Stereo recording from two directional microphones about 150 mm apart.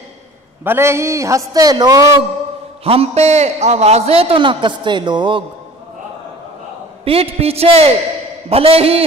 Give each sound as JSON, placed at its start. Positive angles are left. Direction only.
{"t": 0.7, "sound": "a man's voice", "side_deg": -15}
{"t": 2.8, "sound": "a man's voice", "side_deg": -40}
{"t": 7.1, "sound": "a man's voice", "side_deg": -40}